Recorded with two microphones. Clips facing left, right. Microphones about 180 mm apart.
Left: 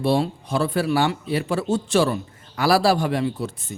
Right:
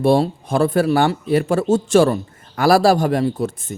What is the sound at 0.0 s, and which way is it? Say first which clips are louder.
Speech: right 5 dB; 50° right (ahead or behind).